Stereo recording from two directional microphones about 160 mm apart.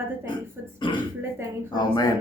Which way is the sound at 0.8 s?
30° left (ahead or behind).